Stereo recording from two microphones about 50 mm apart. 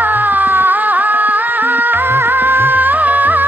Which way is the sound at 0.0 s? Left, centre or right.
Right.